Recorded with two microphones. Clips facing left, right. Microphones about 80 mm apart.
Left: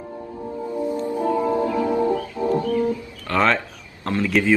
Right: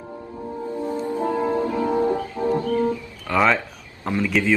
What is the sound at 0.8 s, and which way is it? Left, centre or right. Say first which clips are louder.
Music: left 1 dB; centre.